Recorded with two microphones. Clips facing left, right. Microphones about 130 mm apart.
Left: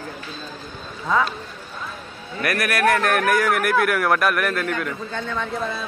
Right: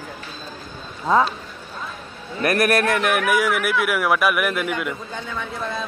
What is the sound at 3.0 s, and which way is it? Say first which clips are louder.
A man's voice: even; 10° right (ahead or behind).